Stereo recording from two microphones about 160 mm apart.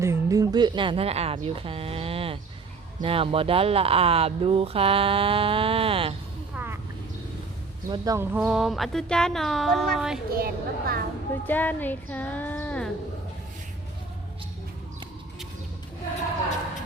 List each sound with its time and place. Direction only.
0.0 s speech: 20° right (ahead or behind); by 6.1 s 35° right (ahead or behind)
6.5 s vehicle: 15° right (ahead or behind)
7.9 s speech: 25° right (ahead or behind)
8.4 s speech: 5° right (ahead or behind)
10.3 s a woman's voice: 70° right (ahead or behind)
11.4 s speech: 10° left (ahead or behind)